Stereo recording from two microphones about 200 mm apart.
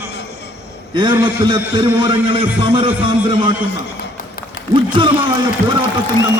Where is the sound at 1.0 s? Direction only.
25° right (ahead or behind).